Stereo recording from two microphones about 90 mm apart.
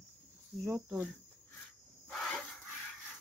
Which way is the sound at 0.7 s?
30° right (ahead or behind).